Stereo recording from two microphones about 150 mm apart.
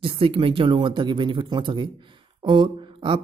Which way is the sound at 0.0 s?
35° right (ahead or behind).